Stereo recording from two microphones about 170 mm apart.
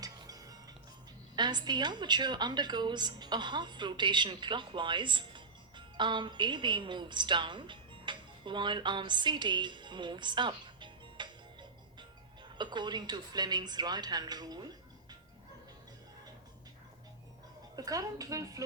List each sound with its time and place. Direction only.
0.0 s music: 20° right (ahead or behind)
1.4 s a woman's voice: 25° right (ahead or behind)
17.7 s a woman's voice: 20° right (ahead or behind)